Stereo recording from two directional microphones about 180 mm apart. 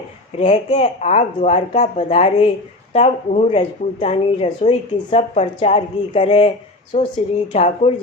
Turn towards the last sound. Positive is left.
turn(degrees=35)  # may be behind; listen again after turning